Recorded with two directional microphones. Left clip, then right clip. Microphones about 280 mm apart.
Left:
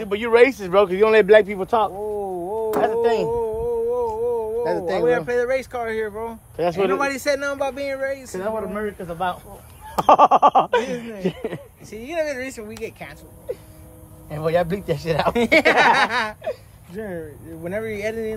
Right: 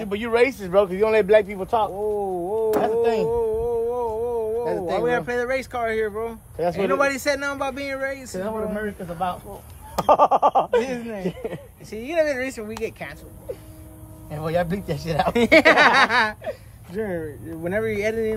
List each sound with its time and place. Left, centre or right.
0.0 s speech: left
2.1 s a sound: centre
2.7 s speech: left
3.3 s a sound: centre
4.6 s a sound: left
5.0 s a man's voice: centre
6.5 s speech: left
6.9 s a man's voice: centre
8.4 s speech: left
11.9 s a man's voice: centre
14.3 s speech: left
15.3 s a man's voice: centre